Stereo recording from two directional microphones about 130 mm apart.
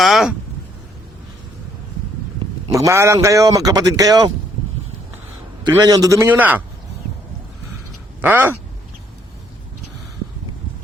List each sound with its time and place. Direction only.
0.0 s a sound: centre (ahead or behind)
2.7 s a man's voice: 25° right (ahead or behind)
5.6 s a man's voice: 30° right (ahead or behind); by 6.6 s 15° right (ahead or behind)
8.2 s speech: 15° right (ahead or behind)